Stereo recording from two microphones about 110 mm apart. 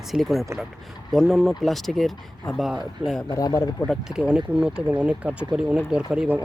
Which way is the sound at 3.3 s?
30° left (ahead or behind).